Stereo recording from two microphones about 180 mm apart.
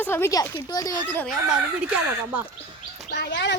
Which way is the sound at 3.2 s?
80° left.